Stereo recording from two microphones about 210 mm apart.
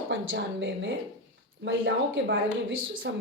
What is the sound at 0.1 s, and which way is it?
Speech, 60° right (ahead or behind).